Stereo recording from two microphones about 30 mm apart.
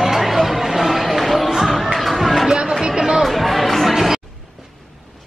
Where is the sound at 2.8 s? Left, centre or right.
Right.